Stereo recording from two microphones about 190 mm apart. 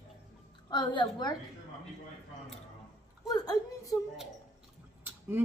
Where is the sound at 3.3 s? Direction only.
20° left (ahead or behind).